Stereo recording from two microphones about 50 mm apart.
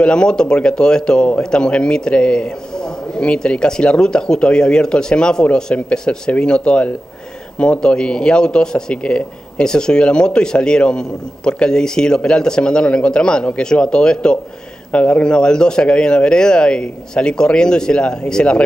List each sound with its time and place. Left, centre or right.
0.0 s a man's voice: centre